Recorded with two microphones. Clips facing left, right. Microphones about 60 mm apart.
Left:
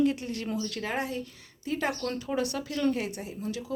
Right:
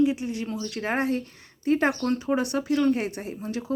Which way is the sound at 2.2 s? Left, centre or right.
Right.